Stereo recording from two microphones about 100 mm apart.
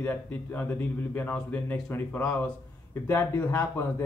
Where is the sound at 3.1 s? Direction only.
25° left (ahead or behind).